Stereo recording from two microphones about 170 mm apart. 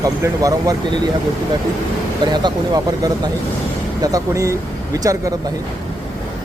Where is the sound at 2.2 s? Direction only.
25° right (ahead or behind).